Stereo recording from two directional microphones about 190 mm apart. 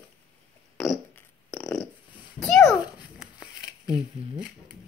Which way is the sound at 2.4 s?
5° left (ahead or behind).